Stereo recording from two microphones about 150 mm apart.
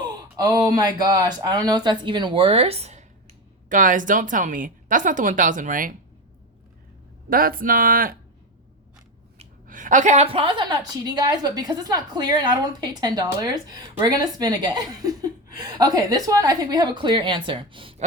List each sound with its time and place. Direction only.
0.0 s a woman's voice: 25° right (ahead or behind); by 3.0 s 45° right (ahead or behind)
3.7 s speech: 60° right (ahead or behind)
7.3 s speech: 75° right (ahead or behind)
9.6 s a woman's voice: 60° right (ahead or behind)
10.2 s a woman's voice: 35° right (ahead or behind)